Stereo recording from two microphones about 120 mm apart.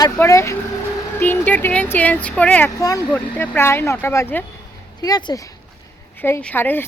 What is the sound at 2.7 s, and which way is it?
Speech, 30° left (ahead or behind).